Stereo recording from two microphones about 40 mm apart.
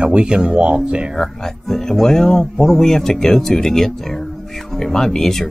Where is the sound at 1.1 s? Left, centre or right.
Centre.